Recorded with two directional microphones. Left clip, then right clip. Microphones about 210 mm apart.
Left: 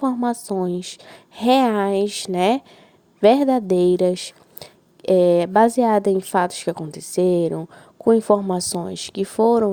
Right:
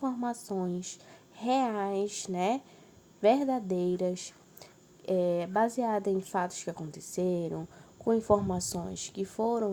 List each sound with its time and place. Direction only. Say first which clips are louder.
0.0 s speech: left 12 dB; 45° left (ahead or behind)